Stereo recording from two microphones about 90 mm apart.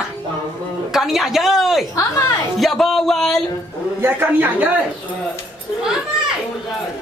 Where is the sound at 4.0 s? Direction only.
20° right (ahead or behind).